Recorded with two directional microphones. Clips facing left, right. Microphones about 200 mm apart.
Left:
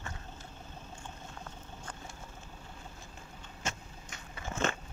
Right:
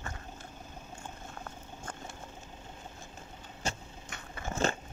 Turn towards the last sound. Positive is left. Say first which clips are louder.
# right 2 dB
turn(degrees=-35)  # may be behind; listen again after turning